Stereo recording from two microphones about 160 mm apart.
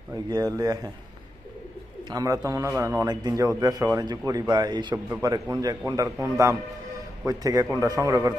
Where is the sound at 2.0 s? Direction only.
20° right (ahead or behind).